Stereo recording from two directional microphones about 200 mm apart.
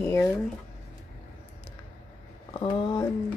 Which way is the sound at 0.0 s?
15° left (ahead or behind).